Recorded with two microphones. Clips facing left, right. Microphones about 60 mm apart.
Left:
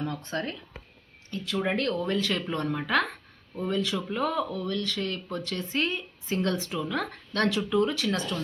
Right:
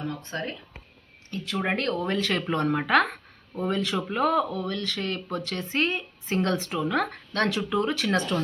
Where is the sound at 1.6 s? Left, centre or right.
Right.